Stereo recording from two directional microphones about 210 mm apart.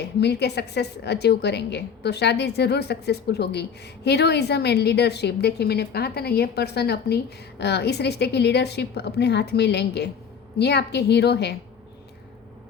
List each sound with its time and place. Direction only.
0.0 s a woman's voice: 50° left (ahead or behind)